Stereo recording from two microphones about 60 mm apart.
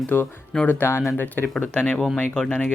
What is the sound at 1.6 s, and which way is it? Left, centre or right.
Speech, left.